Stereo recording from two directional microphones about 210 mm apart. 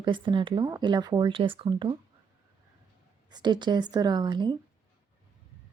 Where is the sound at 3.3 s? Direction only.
20° right (ahead or behind).